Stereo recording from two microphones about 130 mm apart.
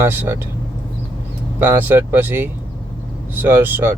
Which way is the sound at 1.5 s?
15° right (ahead or behind).